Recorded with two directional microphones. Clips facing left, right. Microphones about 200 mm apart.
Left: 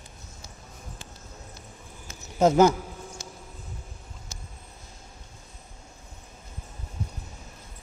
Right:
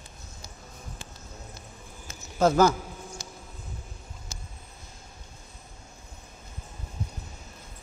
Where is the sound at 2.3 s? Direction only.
20° left (ahead or behind).